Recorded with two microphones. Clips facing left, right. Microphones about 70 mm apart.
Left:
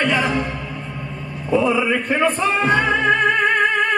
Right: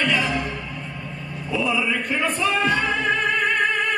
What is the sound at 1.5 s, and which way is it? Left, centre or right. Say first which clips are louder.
Music: left 6 dB; left.